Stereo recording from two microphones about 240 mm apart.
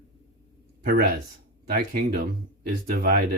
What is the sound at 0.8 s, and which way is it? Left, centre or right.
Speech, right.